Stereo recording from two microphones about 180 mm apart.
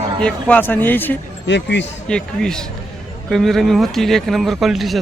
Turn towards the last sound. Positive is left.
turn(degrees=0)  # may be behind; listen again after turning